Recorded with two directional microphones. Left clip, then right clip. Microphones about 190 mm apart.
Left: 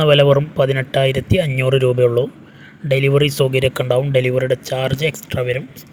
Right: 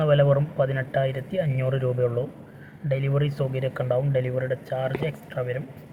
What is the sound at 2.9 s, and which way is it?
Speech, 65° left (ahead or behind).